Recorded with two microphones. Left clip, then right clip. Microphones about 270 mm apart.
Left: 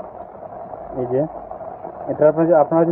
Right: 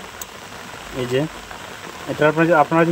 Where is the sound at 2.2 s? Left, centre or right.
Right.